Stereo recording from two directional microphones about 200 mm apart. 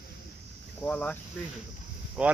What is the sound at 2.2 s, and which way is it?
Speech, 5° right (ahead or behind).